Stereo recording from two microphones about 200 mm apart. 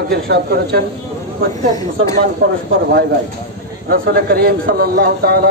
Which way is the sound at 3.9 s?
55° right (ahead or behind).